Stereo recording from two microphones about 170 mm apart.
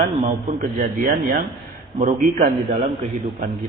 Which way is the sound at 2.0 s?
40° right (ahead or behind).